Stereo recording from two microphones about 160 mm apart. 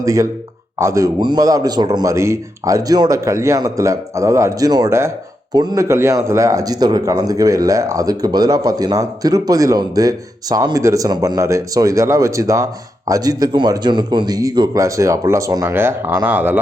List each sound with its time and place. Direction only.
0.0 s a man's voice: 20° right (ahead or behind)